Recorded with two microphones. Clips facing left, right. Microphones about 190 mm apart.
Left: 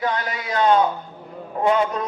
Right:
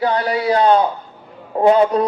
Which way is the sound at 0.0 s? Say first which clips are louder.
Right 8 dB; 35° right (ahead or behind).